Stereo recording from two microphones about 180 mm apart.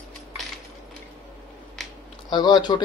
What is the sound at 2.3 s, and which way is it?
Speech, 25° left (ahead or behind).